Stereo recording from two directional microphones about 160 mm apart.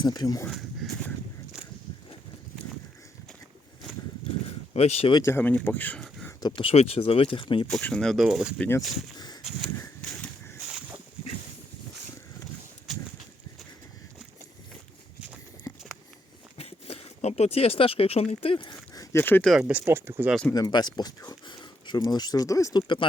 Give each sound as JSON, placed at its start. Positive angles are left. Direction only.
{"t": 0.0, "sound": "speech", "side_deg": 25}
{"t": 0.5, "sound": "a sound", "side_deg": 0}
{"t": 4.7, "sound": "speech", "side_deg": 40}
{"t": 5.1, "sound": "speech", "side_deg": 15}
{"t": 6.6, "sound": "speech", "side_deg": 35}
{"t": 7.7, "sound": "speech", "side_deg": 5}
{"t": 8.5, "sound": "speech", "side_deg": 10}
{"t": 9.1, "sound": "a sound", "side_deg": 25}
{"t": 10.0, "sound": "a sound", "side_deg": 5}
{"t": 16.6, "sound": "a sound", "side_deg": 40}
{"t": 19.1, "sound": "speech", "side_deg": 10}
{"t": 19.5, "sound": "speech", "side_deg": -5}
{"t": 20.5, "sound": "speech", "side_deg": 25}